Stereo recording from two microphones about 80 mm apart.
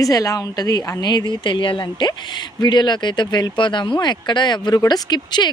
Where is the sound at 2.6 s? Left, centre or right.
Left.